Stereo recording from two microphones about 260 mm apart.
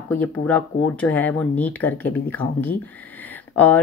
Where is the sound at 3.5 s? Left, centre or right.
Centre.